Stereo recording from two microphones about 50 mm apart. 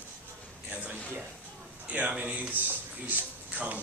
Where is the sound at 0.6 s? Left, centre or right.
Right.